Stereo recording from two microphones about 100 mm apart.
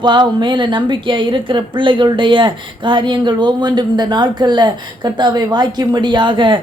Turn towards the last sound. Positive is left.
turn(degrees=-55)  # may be behind; listen again after turning